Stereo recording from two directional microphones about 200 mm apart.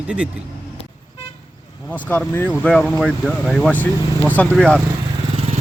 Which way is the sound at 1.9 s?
5° left (ahead or behind).